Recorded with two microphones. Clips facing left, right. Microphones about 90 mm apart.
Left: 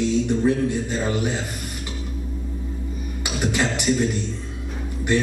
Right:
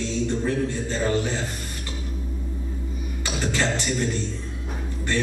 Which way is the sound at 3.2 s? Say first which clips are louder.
Left 2 dB; 15° left (ahead or behind).